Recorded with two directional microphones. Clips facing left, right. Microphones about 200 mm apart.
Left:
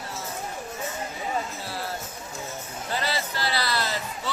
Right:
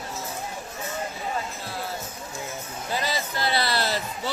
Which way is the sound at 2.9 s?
15° right (ahead or behind).